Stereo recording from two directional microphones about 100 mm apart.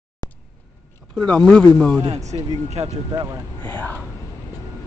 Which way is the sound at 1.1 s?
10° left (ahead or behind).